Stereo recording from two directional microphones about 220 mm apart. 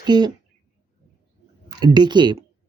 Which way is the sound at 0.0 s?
20° right (ahead or behind).